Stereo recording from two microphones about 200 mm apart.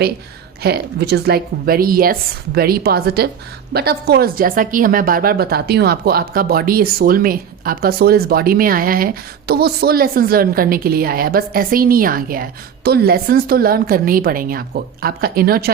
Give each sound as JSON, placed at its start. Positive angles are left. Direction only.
{"t": 0.6, "sound": "a woman's voice", "side_deg": -55}